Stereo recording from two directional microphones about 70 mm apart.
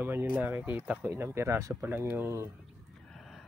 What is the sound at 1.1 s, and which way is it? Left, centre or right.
Speech, right.